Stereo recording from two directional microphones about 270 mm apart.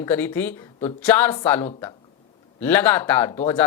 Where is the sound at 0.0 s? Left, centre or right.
Centre.